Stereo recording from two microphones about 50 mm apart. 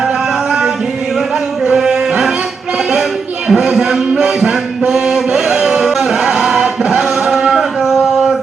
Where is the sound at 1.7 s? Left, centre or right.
Centre.